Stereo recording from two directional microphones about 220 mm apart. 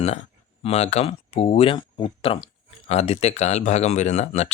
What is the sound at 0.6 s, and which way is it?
Speech, 30° left (ahead or behind).